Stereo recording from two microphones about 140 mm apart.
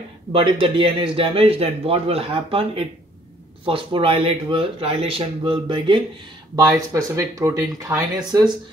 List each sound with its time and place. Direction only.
0.3 s a man's voice: 40° right (ahead or behind)
6.5 s speech: 25° right (ahead or behind)